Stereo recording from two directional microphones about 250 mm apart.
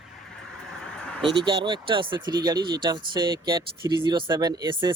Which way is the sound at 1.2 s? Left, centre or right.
Centre.